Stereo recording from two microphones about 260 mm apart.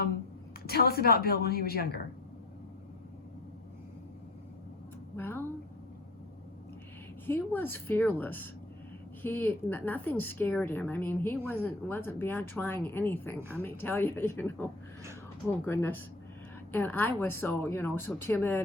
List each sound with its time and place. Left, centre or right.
0.7 s a woman's voice: left
5.1 s a woman's voice: centre
7.3 s a woman's voice: centre